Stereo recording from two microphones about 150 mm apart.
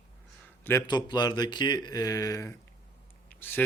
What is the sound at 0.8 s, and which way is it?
Speech, 30° left (ahead or behind).